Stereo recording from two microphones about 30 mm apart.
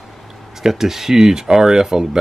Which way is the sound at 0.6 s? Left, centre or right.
Centre.